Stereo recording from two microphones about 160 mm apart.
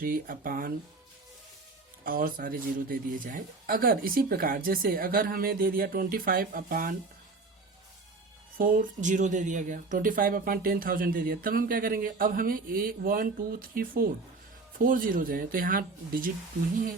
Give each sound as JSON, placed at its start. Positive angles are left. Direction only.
{"t": 0.0, "sound": "speech", "side_deg": -60}
{"t": 2.0, "sound": "speech", "side_deg": -60}
{"t": 8.5, "sound": "speech", "side_deg": -60}